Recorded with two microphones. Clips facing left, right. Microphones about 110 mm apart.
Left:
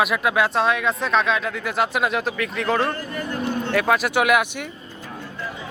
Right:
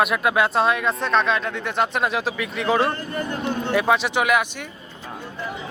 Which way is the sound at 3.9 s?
5° left (ahead or behind).